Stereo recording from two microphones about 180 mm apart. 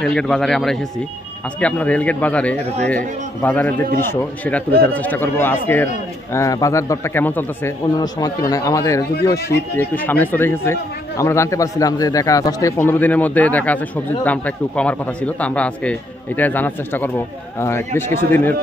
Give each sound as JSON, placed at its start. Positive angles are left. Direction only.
{"t": 0.0, "sound": "speech", "side_deg": 5}
{"t": 7.8, "sound": "a man's voice", "side_deg": 20}